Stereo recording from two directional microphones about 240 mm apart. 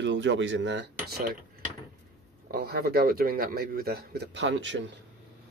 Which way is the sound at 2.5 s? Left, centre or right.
Right.